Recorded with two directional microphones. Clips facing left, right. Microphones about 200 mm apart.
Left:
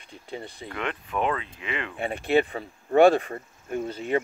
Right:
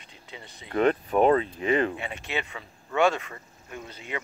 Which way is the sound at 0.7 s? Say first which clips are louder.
Right 8 dB; 40° right (ahead or behind).